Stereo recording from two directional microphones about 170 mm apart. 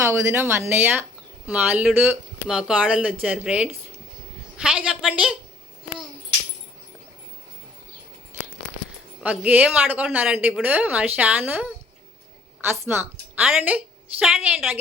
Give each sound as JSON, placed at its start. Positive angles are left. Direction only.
{"t": 0.0, "sound": "a woman's voice", "side_deg": -15}
{"t": 9.2, "sound": "speech", "side_deg": -10}
{"t": 12.8, "sound": "speech", "side_deg": -10}